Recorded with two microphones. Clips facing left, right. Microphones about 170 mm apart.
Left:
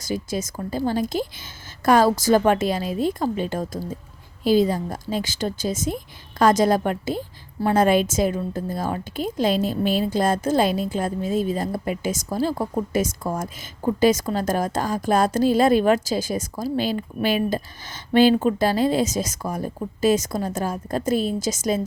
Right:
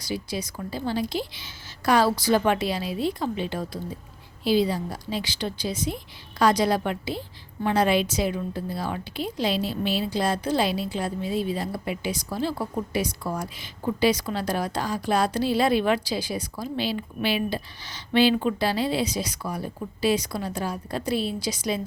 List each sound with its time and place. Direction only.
0.0 s a woman's voice: 45° left (ahead or behind)